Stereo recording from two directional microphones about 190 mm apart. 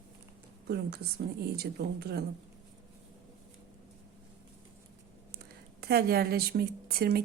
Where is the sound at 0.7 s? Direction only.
60° right (ahead or behind).